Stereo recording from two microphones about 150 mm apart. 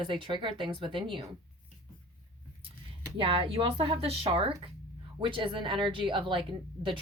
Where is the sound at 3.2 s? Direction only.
35° right (ahead or behind).